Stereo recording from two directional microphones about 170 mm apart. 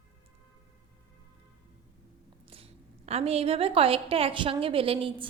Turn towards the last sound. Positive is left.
turn(degrees=-30)  # may be behind; listen again after turning